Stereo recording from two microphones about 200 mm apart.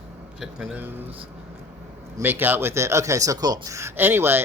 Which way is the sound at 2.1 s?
10° right (ahead or behind).